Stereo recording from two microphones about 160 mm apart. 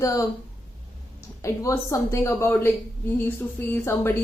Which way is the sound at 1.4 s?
20° left (ahead or behind).